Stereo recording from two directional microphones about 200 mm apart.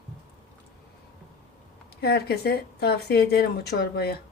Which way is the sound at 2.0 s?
55° left (ahead or behind).